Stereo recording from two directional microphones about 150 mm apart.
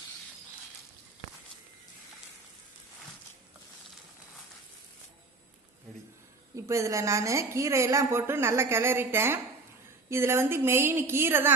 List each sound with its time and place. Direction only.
6.7 s a woman's voice: 20° right (ahead or behind)